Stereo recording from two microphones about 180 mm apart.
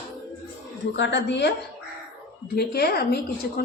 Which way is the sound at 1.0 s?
75° left (ahead or behind).